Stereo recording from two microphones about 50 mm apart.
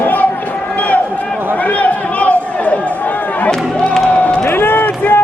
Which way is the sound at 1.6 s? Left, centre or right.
Left.